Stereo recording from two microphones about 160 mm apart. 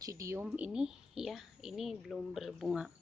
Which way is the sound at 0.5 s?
5° right (ahead or behind).